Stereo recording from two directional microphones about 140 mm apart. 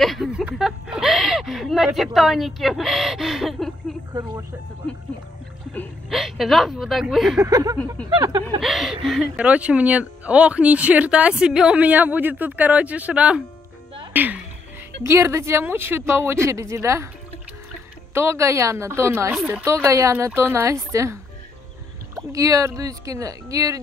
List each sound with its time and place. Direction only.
0.0 s speech: centre (ahead or behind)
6.0 s speech: centre (ahead or behind)
7.3 s speech: 25° right (ahead or behind)
8.5 s speech: centre (ahead or behind); by 17.1 s 20° right (ahead or behind)
18.1 s speech: 20° right (ahead or behind)
19.3 s speech: 10° right (ahead or behind)
19.6 s speech: 20° right (ahead or behind)